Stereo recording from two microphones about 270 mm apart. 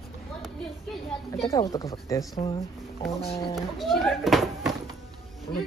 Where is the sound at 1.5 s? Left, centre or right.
Centre.